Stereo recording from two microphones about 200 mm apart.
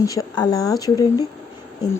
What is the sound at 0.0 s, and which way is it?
Speech, 15° left (ahead or behind).